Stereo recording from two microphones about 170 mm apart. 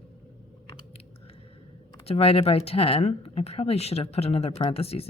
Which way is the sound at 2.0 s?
35° left (ahead or behind).